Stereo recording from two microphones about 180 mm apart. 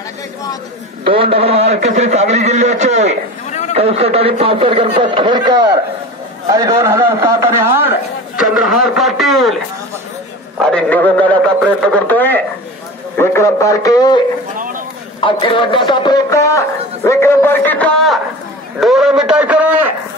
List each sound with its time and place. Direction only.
1.0 s a man's voice: 30° right (ahead or behind)
3.4 s a sound: 40° left (ahead or behind)
3.7 s a man's voice: 35° right (ahead or behind); by 7.9 s 15° right (ahead or behind)
8.4 s a man's voice: centre (ahead or behind)
10.6 s a man's voice: 5° left (ahead or behind)